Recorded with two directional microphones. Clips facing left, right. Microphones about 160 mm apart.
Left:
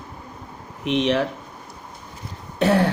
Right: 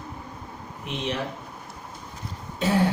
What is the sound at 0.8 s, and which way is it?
Speech, 80° left.